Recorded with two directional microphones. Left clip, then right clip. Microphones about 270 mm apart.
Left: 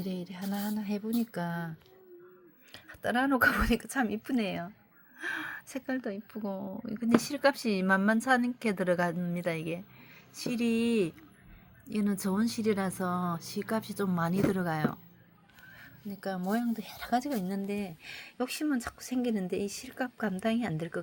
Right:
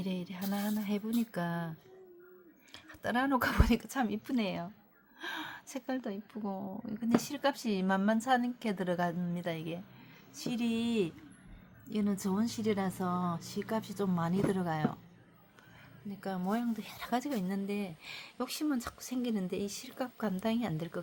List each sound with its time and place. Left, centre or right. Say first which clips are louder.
0.0 s speech: left 1 dB; centre
2.7 s a woman's voice: left 3 dB; centre
16.2 s speech: left 3 dB; centre